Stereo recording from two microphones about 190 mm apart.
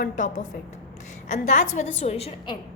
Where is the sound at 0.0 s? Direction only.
40° left (ahead or behind).